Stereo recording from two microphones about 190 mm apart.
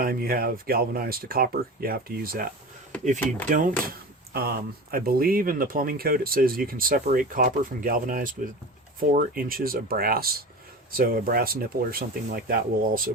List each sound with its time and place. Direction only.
0.0 s speech: 50° right (ahead or behind)
3.5 s speech: 45° right (ahead or behind)